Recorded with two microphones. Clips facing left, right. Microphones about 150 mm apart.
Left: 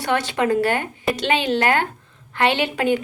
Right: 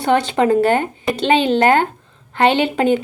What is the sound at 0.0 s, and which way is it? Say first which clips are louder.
Speech: right 6 dB; 25° right (ahead or behind).